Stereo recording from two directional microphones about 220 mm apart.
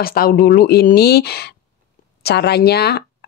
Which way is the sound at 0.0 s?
40° left (ahead or behind).